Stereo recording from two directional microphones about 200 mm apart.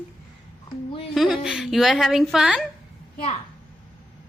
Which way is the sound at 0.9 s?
25° left (ahead or behind).